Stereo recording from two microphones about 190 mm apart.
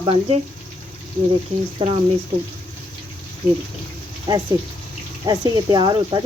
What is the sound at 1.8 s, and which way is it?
Speech, 25° right (ahead or behind).